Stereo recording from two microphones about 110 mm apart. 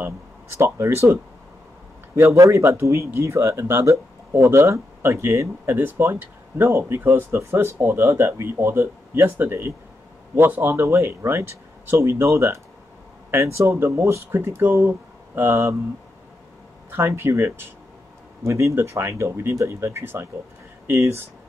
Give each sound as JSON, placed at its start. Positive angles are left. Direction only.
{"t": 0.0, "sound": "speech", "side_deg": -20}
{"t": 16.9, "sound": "speech", "side_deg": -20}